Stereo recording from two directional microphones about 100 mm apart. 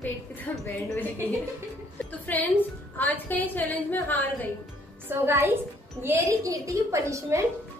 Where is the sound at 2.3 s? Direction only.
15° left (ahead or behind).